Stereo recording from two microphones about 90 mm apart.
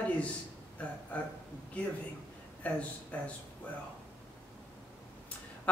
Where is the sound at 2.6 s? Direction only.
15° left (ahead or behind).